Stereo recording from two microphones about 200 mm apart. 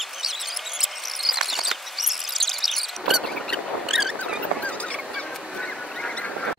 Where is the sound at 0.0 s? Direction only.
Centre (ahead or behind).